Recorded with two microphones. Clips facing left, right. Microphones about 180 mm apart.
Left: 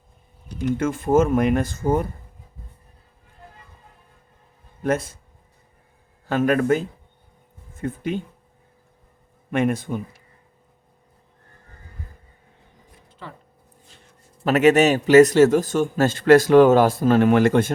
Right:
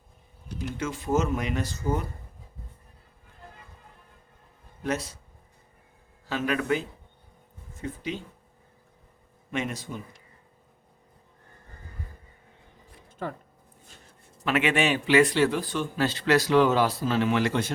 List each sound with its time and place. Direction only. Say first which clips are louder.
0.8 s a man's voice: left 8 dB; 50° left (ahead or behind)
4.8 s a man's voice: left 7 dB; 50° left (ahead or behind)
6.2 s a man's voice: left 8 dB; 50° left (ahead or behind)
9.5 s a man's voice: left 10 dB; 55° left (ahead or behind)
13.1 s a sound: right 6 dB; 50° right (ahead or behind)
14.4 s a man's voice: left 9 dB; 40° left (ahead or behind)